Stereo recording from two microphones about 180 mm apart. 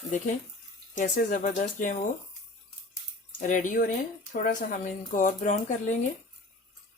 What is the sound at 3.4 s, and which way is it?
Speech, 45° left (ahead or behind).